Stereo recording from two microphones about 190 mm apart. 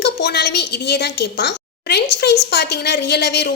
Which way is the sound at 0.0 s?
60° left (ahead or behind).